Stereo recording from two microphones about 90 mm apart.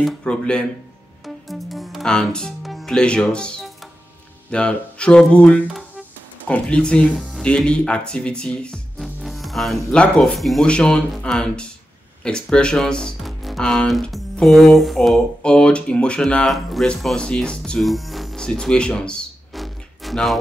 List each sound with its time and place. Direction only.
0.0 s speech: 5° left (ahead or behind)
1.2 s music: centre (ahead or behind)
4.5 s speech: 10° left (ahead or behind)
5.7 s music: centre (ahead or behind)
6.4 s speech: 10° left (ahead or behind)